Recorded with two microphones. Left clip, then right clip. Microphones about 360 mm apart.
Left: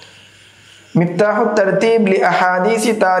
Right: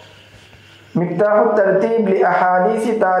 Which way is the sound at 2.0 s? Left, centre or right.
Left.